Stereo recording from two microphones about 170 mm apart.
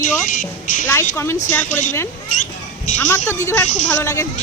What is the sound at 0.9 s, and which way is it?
Speech, 15° left (ahead or behind).